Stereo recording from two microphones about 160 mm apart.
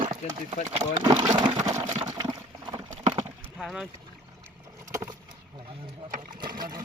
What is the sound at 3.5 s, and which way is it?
Speech, centre (ahead or behind).